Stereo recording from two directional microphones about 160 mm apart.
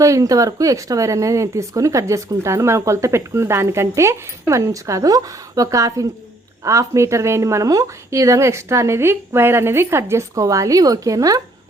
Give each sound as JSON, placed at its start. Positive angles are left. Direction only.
{"t": 0.0, "sound": "a woman's voice", "side_deg": -20}